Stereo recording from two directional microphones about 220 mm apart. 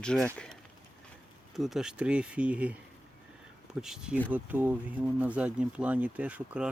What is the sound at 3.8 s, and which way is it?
Speech, 5° right (ahead or behind).